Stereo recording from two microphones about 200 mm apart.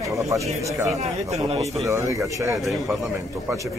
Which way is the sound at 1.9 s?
15° right (ahead or behind).